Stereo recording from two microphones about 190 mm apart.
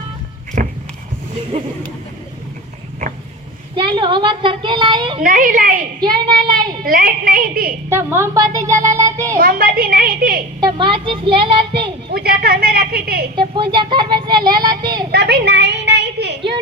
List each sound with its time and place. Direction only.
0.6 s walk: 45° right (ahead or behind)
3.8 s speech: 25° right (ahead or behind)
5.2 s a woman's voice: 45° right (ahead or behind)
6.0 s speech: 25° right (ahead or behind)
6.8 s a woman's voice: 50° right (ahead or behind)
7.9 s speech: 15° right (ahead or behind)
9.3 s a woman's voice: 50° right (ahead or behind)
10.6 s speech: 25° right (ahead or behind)
12.1 s a woman's voice: 55° right (ahead or behind)
13.3 s speech: 25° right (ahead or behind)
15.1 s a sound: 60° right (ahead or behind)